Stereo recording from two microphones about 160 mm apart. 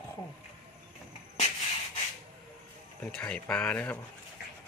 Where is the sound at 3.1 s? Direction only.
5° left (ahead or behind).